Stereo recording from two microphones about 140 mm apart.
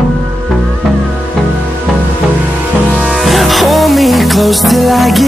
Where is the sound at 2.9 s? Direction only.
5° right (ahead or behind).